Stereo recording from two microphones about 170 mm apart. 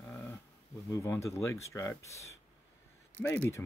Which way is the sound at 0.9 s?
15° left (ahead or behind).